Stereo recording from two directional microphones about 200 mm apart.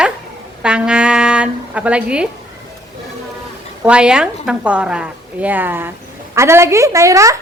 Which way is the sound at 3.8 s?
5° right (ahead or behind).